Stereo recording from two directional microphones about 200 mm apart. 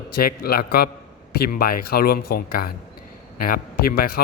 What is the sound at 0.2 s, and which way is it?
A man's voice, 50° left (ahead or behind).